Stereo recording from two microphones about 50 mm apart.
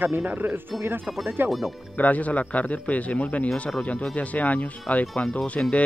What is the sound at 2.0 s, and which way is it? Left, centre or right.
A man's voice, left.